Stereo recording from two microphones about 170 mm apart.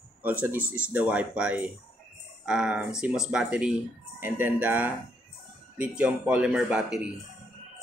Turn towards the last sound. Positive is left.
turn(degrees=-5)  # may be behind; listen again after turning